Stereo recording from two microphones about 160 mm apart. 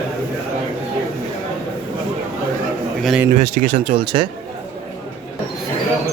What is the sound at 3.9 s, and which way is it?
Speech, 35° right (ahead or behind).